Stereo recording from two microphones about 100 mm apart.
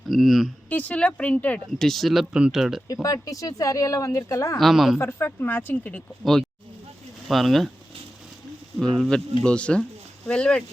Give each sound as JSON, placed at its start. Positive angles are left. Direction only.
{"t": 0.1, "sound": "speech", "side_deg": 0}
{"t": 0.7, "sound": "speech", "side_deg": 15}
{"t": 2.8, "sound": "speech", "side_deg": 35}
{"t": 4.5, "sound": "speech", "side_deg": 0}
{"t": 4.9, "sound": "speech", "side_deg": 20}
{"t": 7.3, "sound": "speech", "side_deg": 0}
{"t": 8.8, "sound": "speech", "side_deg": 5}